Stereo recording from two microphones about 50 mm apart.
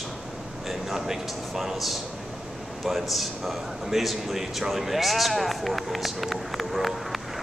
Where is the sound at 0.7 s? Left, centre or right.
Centre.